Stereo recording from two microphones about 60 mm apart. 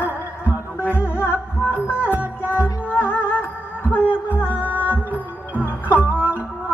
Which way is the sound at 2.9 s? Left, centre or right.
Left.